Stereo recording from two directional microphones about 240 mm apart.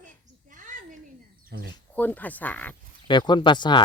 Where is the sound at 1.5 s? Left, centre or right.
Right.